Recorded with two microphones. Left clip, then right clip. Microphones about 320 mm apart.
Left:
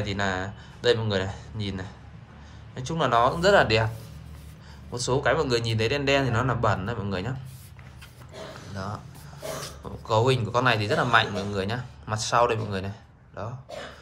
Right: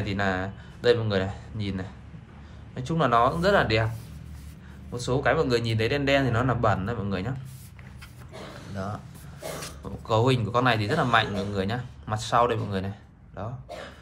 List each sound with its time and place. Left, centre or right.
0.0 s speech: centre
4.9 s speech: centre
8.7 s speech: centre
10.0 s speech: centre